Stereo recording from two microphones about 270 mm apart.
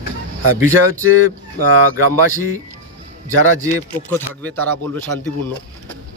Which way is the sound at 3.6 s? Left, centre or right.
Centre.